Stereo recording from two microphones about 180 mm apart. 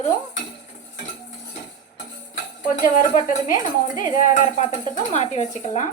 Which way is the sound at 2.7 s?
45° left (ahead or behind).